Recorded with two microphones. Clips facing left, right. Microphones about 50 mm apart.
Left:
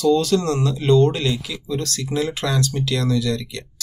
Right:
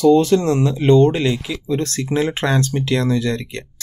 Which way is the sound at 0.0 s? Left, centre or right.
Right.